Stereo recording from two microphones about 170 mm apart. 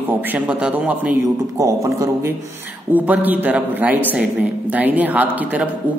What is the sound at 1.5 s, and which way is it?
Speech, 20° right (ahead or behind).